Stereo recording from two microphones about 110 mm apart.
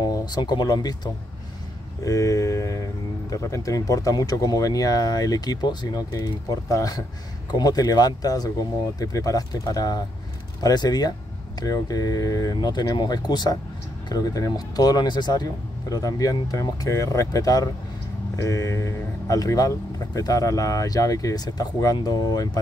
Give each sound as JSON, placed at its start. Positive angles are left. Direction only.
{"t": 0.0, "sound": "speech", "side_deg": 40}